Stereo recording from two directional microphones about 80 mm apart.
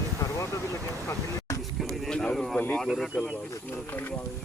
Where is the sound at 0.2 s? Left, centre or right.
Left.